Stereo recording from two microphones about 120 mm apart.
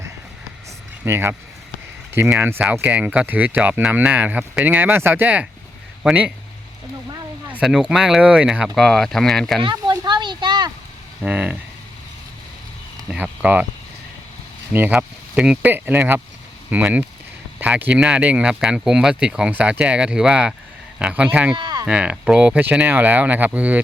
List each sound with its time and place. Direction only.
1.0 s speech: 20° right (ahead or behind)
2.4 s speech: 15° right (ahead or behind)
7.6 s speech: 5° right (ahead or behind)
9.6 s a sound: 35° right (ahead or behind)
11.3 s speech: 10° right (ahead or behind)
13.1 s speech: 10° right (ahead or behind)
14.7 s speech: 15° right (ahead or behind)
21.5 s a sound: 35° right (ahead or behind)
21.8 s speech: 10° right (ahead or behind)